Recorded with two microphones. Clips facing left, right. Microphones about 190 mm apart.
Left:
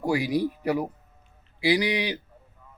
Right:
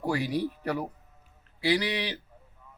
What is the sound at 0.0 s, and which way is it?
Speech, 10° left (ahead or behind).